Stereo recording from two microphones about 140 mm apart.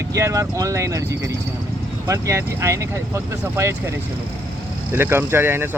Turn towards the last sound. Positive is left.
turn(degrees=-15)  # may be behind; listen again after turning